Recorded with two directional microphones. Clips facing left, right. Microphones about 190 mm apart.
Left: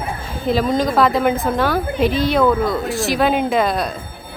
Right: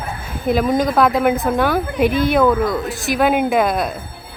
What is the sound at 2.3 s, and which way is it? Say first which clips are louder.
Speech: right 1 dB; centre (ahead or behind).